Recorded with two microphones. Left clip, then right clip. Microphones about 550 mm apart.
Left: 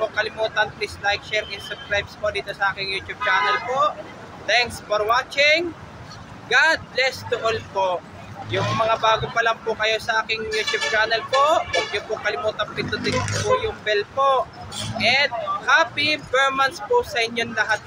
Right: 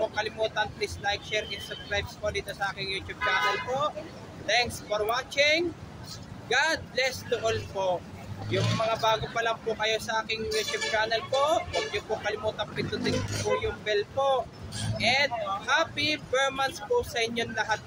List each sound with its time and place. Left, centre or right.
0.1 s speech: right